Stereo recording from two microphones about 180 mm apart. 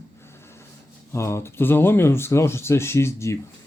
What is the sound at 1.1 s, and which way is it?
Speech, 15° left (ahead or behind).